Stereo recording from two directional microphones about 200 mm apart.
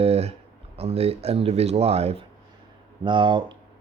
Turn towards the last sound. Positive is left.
turn(degrees=-25)  # may be behind; listen again after turning